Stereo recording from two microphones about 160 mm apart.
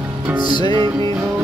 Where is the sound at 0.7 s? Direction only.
30° right (ahead or behind).